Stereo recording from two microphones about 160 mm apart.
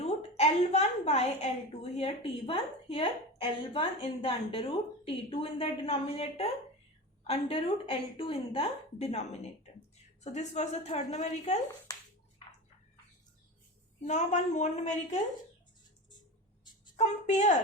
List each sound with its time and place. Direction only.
0.0 s a woman's voice: 40° left (ahead or behind)
14.0 s a woman's voice: 50° left (ahead or behind)
17.0 s a woman's voice: 45° left (ahead or behind)